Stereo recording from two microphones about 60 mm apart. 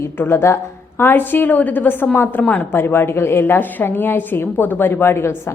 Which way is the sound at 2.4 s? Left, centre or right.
Left.